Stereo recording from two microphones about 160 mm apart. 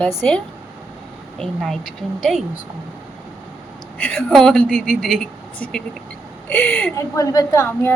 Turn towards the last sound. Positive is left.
turn(degrees=15)  # may be behind; listen again after turning